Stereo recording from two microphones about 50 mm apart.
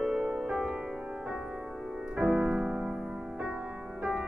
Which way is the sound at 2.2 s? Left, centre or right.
Right.